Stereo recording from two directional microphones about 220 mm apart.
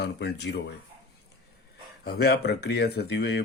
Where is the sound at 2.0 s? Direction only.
45° left (ahead or behind).